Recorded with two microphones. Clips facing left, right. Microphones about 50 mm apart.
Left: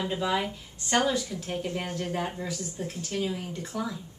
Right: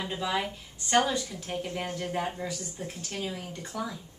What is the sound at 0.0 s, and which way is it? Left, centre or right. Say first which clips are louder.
A woman's voice: left 3 dB; centre.